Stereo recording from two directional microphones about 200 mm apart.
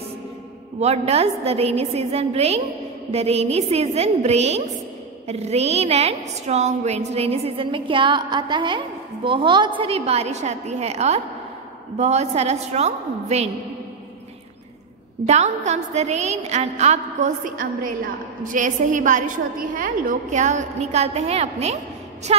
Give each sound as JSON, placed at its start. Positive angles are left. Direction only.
{"t": 0.7, "sound": "a woman's voice", "side_deg": -30}
{"t": 15.2, "sound": "a woman's voice", "side_deg": -35}